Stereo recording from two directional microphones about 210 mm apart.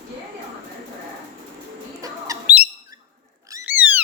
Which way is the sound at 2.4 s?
5° right (ahead or behind).